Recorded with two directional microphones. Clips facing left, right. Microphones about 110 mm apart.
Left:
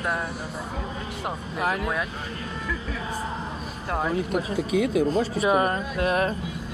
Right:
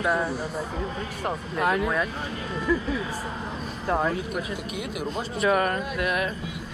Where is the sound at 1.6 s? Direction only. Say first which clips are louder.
Right 2 dB; 5° left (ahead or behind).